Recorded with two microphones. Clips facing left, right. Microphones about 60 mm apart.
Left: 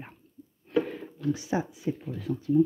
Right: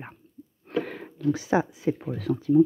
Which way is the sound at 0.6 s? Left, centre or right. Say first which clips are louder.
Left 2 dB; right.